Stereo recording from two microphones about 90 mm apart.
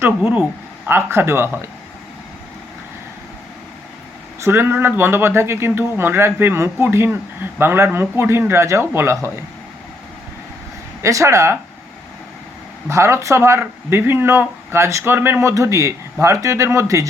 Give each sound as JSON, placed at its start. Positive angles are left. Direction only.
{"t": 0.2, "sound": "speech", "side_deg": -20}
{"t": 4.4, "sound": "speech", "side_deg": -30}
{"t": 11.0, "sound": "speech", "side_deg": -35}
{"t": 12.9, "sound": "speech", "side_deg": -30}